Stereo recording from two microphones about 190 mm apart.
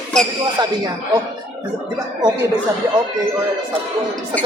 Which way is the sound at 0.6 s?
20° right (ahead or behind).